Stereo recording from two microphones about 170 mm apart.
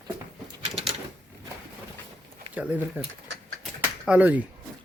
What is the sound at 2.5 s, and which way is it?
Speech, 10° right (ahead or behind).